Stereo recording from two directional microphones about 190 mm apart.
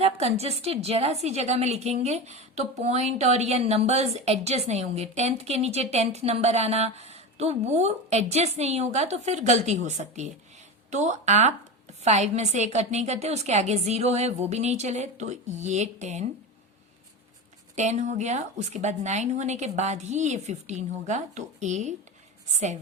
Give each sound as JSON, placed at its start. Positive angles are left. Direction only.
{"t": 0.0, "sound": "a woman's voice", "side_deg": -35}
{"t": 17.7, "sound": "a woman's voice", "side_deg": -35}